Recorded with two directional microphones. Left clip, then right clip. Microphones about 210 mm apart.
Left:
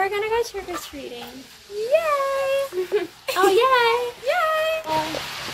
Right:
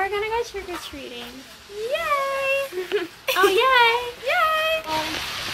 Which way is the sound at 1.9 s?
Centre (ahead or behind).